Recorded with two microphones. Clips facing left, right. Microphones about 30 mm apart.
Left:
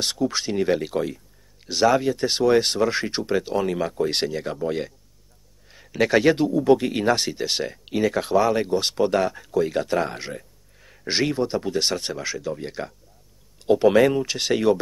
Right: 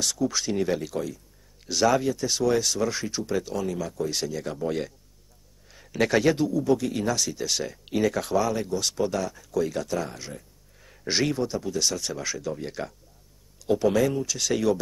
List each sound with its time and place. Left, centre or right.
0.0 s speech: left
1.7 s speech: left
2.1 s speech: left
4.3 s speech: left
4.6 s speech: centre
6.3 s speech: left
7.8 s speech: centre
8.5 s speech: left
9.5 s speech: left
10.8 s a sound: centre
11.4 s speech: left
12.2 s speech: centre
13.7 s speech: left